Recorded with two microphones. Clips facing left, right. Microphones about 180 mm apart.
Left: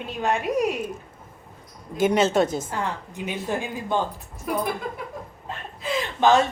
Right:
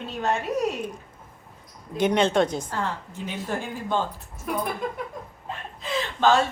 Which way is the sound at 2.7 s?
15° left (ahead or behind).